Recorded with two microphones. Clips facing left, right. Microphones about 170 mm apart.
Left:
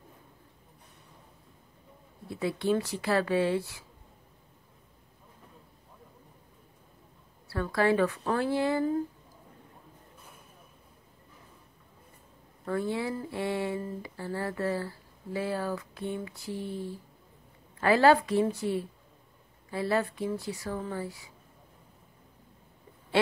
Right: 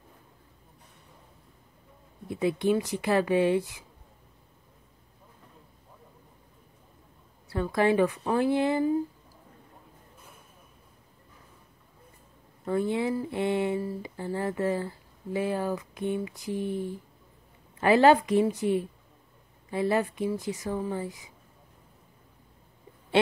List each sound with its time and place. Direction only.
2.2 s speech: 20° right (ahead or behind)
7.4 s speech: 20° right (ahead or behind)
12.6 s speech: 20° right (ahead or behind)